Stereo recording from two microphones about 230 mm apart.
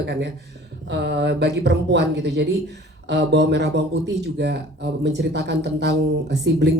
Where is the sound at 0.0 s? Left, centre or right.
Right.